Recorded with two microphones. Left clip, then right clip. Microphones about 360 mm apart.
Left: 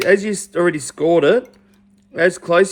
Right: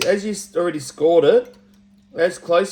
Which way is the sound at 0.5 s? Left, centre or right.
Left.